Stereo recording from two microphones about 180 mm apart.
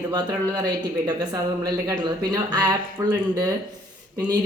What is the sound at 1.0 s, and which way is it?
Speech, 20° right (ahead or behind).